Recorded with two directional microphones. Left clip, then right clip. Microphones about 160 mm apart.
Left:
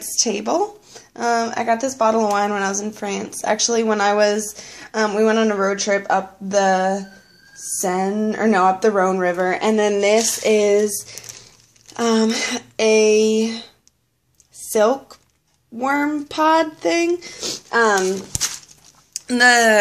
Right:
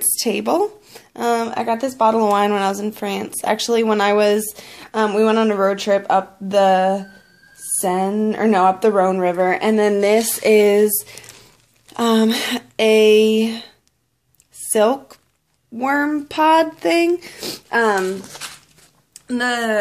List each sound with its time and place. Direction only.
0.0 s a woman's voice: 45° right (ahead or behind)
14.7 s speech: 35° right (ahead or behind)
19.2 s speech: 10° right (ahead or behind)